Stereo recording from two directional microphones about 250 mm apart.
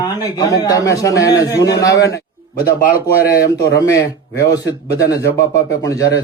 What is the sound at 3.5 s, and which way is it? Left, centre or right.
A man's voice, centre.